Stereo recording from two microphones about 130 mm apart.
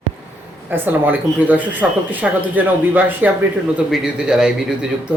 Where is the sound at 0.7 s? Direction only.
15° right (ahead or behind).